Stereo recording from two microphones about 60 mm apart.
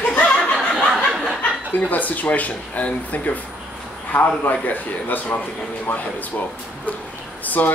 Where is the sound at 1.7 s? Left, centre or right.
Left.